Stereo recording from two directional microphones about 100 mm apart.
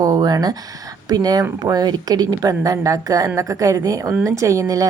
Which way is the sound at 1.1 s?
40° right (ahead or behind).